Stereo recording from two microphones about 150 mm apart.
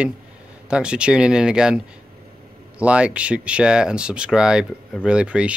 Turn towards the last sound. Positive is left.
turn(degrees=-5)  # may be behind; listen again after turning